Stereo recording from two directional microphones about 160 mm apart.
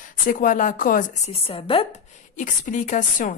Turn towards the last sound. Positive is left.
turn(degrees=50)  # may be behind; listen again after turning